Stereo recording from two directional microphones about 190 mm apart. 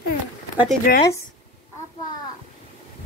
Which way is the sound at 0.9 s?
50° left (ahead or behind).